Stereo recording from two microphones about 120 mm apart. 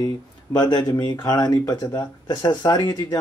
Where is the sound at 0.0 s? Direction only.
35° left (ahead or behind).